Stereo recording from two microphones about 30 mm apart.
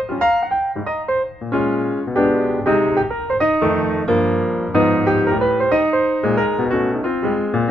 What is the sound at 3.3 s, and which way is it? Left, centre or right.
Music, left.